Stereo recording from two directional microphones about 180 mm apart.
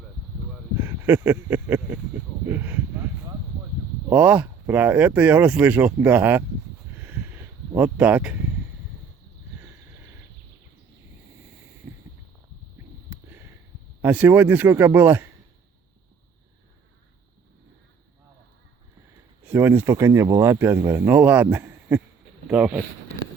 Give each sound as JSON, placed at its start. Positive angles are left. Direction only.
{"t": 0.8, "sound": "speech", "side_deg": -15}
{"t": 4.1, "sound": "speech", "side_deg": -10}
{"t": 7.7, "sound": "speech", "side_deg": -10}
{"t": 11.9, "sound": "a sound", "side_deg": -15}
{"t": 14.0, "sound": "speech", "side_deg": -10}
{"t": 19.5, "sound": "speech", "side_deg": -10}